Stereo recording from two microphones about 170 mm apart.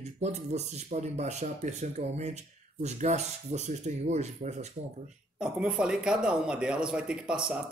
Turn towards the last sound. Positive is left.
turn(degrees=-5)  # may be behind; listen again after turning